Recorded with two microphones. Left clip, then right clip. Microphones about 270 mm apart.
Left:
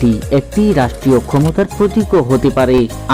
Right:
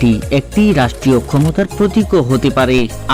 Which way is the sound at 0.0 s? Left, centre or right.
Right.